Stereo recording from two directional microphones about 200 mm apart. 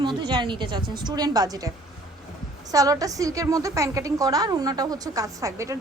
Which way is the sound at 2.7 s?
15° right (ahead or behind).